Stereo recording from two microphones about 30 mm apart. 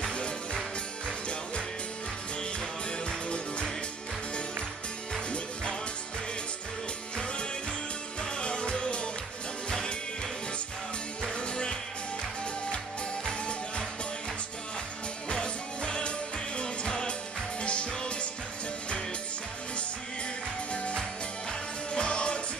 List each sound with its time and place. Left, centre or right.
0.1 s music: left
3.1 s music: left
8.2 s music: left
11.2 s music: left
15.2 s music: left
20.7 s music: left